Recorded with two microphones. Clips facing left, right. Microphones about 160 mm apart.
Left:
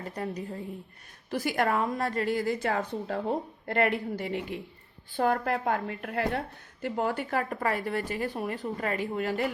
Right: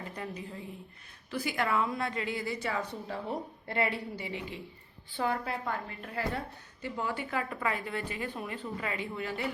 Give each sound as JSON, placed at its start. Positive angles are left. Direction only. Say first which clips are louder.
{"t": 0.0, "sound": "a woman's voice", "louder": "left 5 dB", "side_deg": 40}